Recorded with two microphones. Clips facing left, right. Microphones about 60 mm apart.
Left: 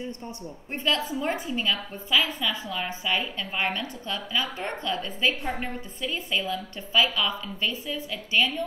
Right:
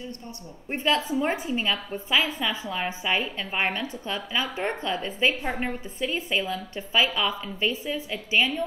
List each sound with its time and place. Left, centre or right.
0.7 s a woman's voice: right